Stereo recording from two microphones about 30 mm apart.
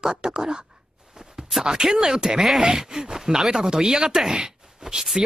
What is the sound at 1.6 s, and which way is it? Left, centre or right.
Speech, right.